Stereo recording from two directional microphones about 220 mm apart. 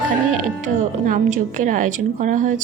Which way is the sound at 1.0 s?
35° right (ahead or behind).